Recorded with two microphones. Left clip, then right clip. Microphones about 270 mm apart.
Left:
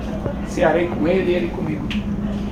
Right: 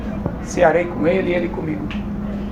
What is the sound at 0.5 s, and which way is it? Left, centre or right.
Speech, right.